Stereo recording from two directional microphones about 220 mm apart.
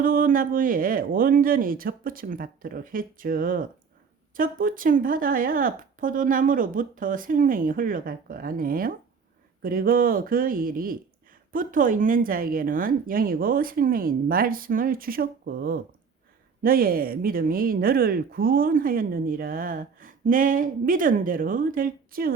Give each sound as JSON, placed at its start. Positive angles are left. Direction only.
{"t": 0.0, "sound": "speech", "side_deg": -40}